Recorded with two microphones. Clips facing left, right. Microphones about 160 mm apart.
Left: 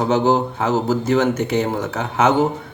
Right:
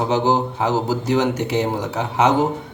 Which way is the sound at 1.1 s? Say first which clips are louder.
Left 1 dB; 10° right (ahead or behind).